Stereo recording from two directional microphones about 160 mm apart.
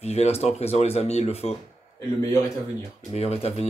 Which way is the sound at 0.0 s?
40° left (ahead or behind).